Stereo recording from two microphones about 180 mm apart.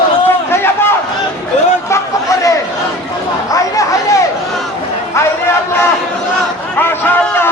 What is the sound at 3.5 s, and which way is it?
Chatter, 20° left (ahead or behind).